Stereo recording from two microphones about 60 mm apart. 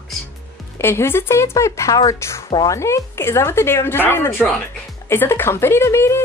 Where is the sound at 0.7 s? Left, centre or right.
Left.